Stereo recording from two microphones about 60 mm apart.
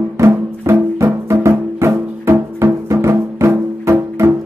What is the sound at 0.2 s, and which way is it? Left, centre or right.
Music, right.